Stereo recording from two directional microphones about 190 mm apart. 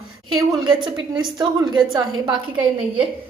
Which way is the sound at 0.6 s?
25° right (ahead or behind).